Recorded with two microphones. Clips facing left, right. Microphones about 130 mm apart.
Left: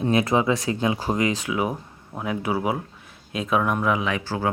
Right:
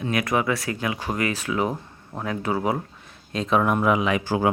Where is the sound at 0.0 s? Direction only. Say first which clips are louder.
Left 3 dB; 25° left (ahead or behind).